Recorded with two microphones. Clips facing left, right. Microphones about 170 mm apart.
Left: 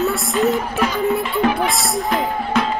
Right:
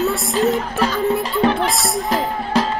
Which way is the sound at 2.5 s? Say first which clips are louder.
Right 1 dB; 35° right (ahead or behind).